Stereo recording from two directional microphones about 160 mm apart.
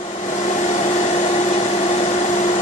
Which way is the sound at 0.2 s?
45° left (ahead or behind).